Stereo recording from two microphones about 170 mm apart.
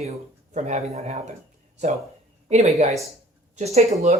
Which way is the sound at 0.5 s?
40° right (ahead or behind).